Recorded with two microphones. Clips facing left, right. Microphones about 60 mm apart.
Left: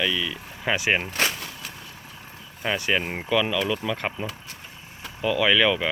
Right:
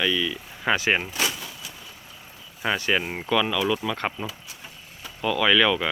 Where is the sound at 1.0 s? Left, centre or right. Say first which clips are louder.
Left 2 dB; left.